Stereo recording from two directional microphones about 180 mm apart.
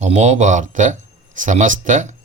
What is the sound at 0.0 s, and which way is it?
Speech, 40° right (ahead or behind).